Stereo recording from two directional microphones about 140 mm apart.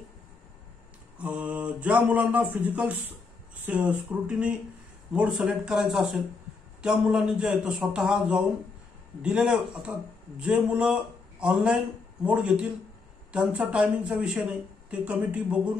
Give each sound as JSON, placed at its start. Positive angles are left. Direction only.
{"t": 1.1, "sound": "speech", "side_deg": -10}